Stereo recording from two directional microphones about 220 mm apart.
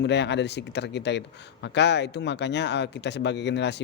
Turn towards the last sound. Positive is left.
turn(degrees=50)  # may be behind; listen again after turning